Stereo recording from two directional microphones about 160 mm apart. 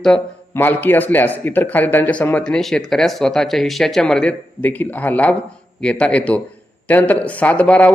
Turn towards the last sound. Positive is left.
turn(degrees=10)  # may be behind; listen again after turning